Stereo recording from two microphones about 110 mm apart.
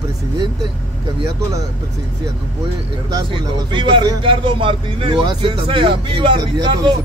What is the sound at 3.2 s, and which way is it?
Speech, 45° right (ahead or behind).